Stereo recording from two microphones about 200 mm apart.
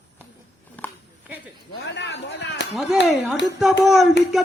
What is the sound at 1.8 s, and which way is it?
Chop, 60° left (ahead or behind).